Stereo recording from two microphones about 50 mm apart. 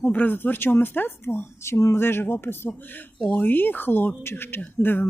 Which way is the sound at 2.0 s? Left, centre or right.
Left.